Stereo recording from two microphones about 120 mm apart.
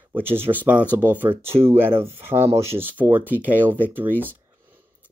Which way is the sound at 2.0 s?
20° right (ahead or behind).